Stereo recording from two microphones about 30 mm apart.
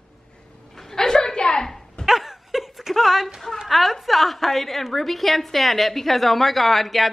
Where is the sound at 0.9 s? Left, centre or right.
Left.